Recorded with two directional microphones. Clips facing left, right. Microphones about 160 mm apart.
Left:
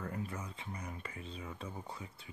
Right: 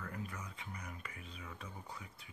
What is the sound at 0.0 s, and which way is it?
Speech, 30° left (ahead or behind).